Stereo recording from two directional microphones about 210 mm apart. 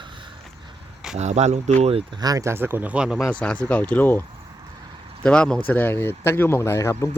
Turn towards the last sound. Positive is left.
turn(degrees=15)  # may be behind; listen again after turning